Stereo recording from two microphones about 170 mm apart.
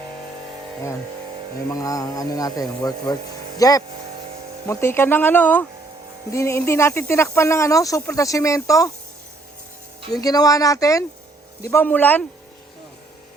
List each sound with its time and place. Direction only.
1.7 s speech: 20° left (ahead or behind)
10.1 s speech: 20° left (ahead or behind)